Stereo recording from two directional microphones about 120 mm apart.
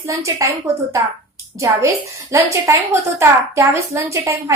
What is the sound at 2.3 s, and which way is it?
A woman's voice, 25° right (ahead or behind).